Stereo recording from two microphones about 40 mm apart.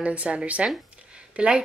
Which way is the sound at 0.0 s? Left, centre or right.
Right.